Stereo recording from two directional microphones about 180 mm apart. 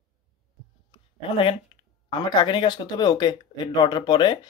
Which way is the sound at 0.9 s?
30° left (ahead or behind).